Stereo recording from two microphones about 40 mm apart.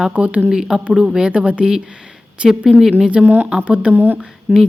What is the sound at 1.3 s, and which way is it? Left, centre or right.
Speech, right.